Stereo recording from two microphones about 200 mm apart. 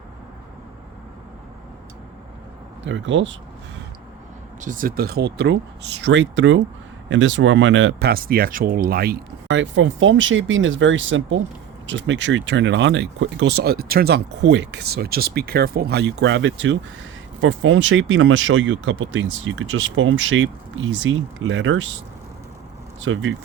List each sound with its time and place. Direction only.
2.8 s speech: 65° right (ahead or behind)
4.6 s speech: 40° right (ahead or behind); by 21.8 s 70° right (ahead or behind)
23.0 s speech: 75° right (ahead or behind)